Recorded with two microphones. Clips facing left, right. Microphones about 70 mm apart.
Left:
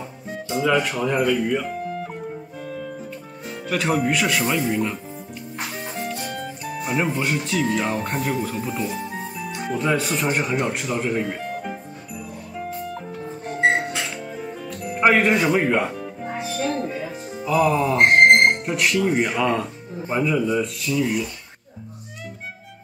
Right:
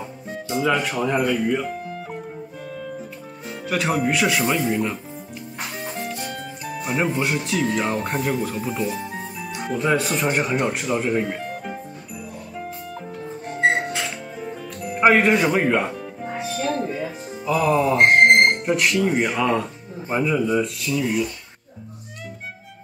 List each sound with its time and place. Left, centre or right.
0.3 s speech: centre
1.5 s music: centre
3.4 s speech: centre
12.5 s music: centre
14.3 s music: centre
18.2 s speech: centre